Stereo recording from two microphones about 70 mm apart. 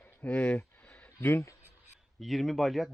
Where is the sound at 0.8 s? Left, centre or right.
Left.